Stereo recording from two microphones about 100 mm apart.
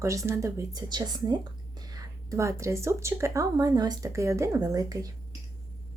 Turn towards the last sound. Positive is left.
turn(degrees=-35)  # may be behind; listen again after turning